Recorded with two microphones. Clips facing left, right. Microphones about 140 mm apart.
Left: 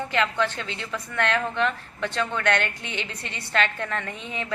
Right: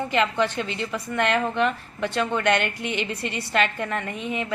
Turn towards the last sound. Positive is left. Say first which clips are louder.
# right 4 dB
turn(degrees=-15)  # may be behind; listen again after turning